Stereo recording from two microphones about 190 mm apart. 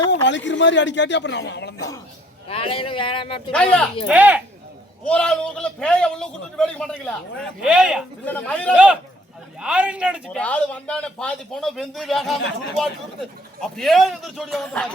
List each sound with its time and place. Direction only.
0.1 s a man's voice: 70° left (ahead or behind)
2.5 s speech: 30° left (ahead or behind)
3.5 s a man's voice: 5° left (ahead or behind)
4.1 s speech: 10° right (ahead or behind)
5.0 s a man's voice: 5° left (ahead or behind)
8.2 s speech: 5° left (ahead or behind)
8.7 s a man's voice: 5° right (ahead or behind)
10.3 s a man's voice: 5° left (ahead or behind)